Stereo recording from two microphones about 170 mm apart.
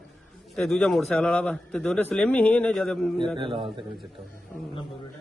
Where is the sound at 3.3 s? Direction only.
30° right (ahead or behind).